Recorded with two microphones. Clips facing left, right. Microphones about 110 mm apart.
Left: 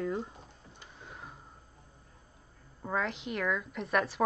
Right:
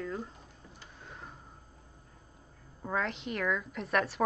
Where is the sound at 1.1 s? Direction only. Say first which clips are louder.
Even; 5° left (ahead or behind).